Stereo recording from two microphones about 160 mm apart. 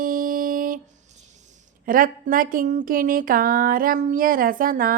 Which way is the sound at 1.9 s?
60° right (ahead or behind).